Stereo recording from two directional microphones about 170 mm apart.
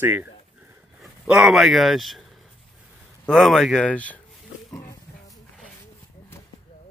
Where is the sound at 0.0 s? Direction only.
10° right (ahead or behind).